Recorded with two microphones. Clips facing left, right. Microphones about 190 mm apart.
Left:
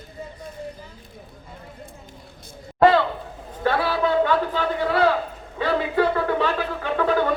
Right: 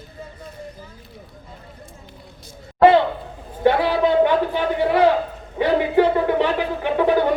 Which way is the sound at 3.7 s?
20° right (ahead or behind).